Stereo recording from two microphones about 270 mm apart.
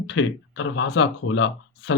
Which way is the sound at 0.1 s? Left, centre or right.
Left.